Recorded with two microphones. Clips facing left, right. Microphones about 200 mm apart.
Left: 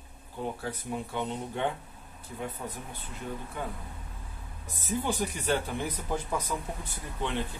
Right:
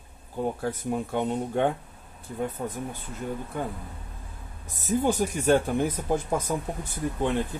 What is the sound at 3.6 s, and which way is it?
Speech, 45° right (ahead or behind).